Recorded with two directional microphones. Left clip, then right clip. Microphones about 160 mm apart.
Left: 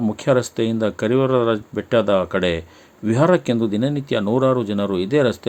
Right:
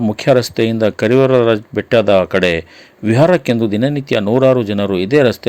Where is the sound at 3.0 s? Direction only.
20° right (ahead or behind).